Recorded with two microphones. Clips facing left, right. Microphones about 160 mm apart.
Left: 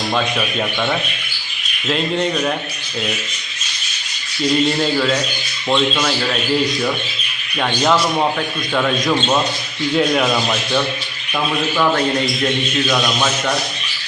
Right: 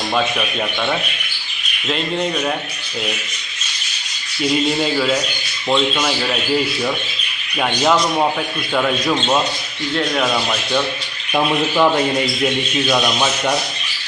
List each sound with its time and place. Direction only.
0.1 s speech: centre (ahead or behind)
4.4 s speech: 5° right (ahead or behind)
7.6 s speech: 5° right (ahead or behind)
11.3 s speech: 20° right (ahead or behind)